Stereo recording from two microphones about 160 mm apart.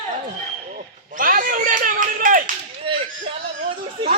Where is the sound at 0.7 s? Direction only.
55° right (ahead or behind).